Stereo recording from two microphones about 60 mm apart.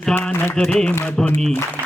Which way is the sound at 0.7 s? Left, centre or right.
Centre.